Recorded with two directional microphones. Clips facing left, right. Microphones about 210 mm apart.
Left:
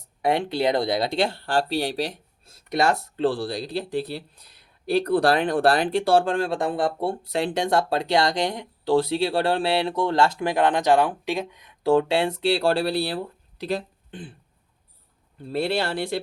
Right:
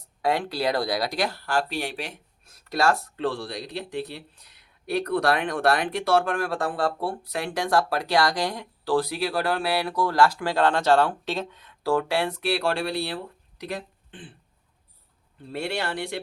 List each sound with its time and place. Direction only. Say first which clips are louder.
0.2 s speech: left 3 dB; 20° left (ahead or behind)
15.5 s speech: left 5 dB; 35° left (ahead or behind)